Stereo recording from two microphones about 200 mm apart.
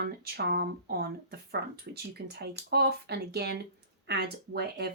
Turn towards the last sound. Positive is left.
turn(degrees=-55)  # may be behind; listen again after turning